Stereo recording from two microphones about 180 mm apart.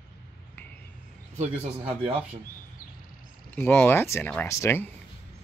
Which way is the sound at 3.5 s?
10° left (ahead or behind).